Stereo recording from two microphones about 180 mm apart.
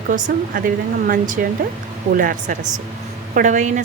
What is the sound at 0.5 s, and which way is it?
A woman's voice, 50° right (ahead or behind).